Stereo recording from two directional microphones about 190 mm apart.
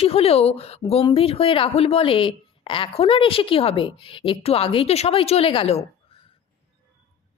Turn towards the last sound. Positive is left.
turn(degrees=30)  # may be behind; listen again after turning